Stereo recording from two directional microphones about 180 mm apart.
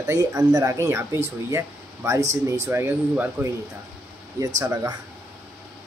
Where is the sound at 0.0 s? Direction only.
20° right (ahead or behind).